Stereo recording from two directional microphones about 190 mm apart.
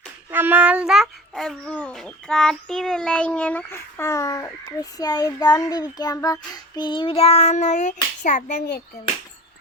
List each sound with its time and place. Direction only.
0.3 s a child's voice: 10° right (ahead or behind); by 8.5 s 40° left (ahead or behind)
8.5 s a child's voice: 60° left (ahead or behind)